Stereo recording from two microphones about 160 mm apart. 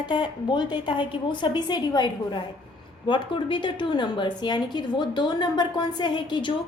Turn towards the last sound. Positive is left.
turn(degrees=30)  # may be behind; listen again after turning